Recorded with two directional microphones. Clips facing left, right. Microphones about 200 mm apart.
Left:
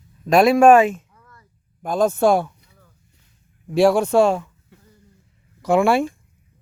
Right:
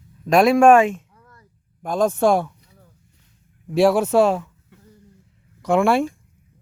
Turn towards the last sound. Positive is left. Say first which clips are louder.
# left 1 dB
turn(degrees=0)  # may be behind; listen again after turning